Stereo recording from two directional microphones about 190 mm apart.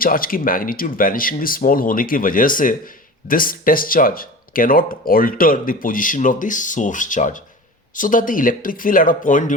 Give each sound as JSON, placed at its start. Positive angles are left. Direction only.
{"t": 0.0, "sound": "speech", "side_deg": 50}